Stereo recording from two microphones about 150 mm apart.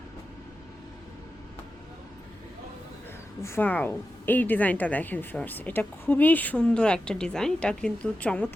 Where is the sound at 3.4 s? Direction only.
15° left (ahead or behind).